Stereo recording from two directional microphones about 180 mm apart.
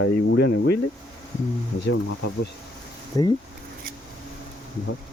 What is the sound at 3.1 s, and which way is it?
Speech, 20° left (ahead or behind).